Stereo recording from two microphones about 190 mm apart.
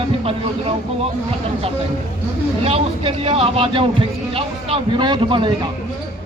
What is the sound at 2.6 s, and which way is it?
Speech, 30° right (ahead or behind).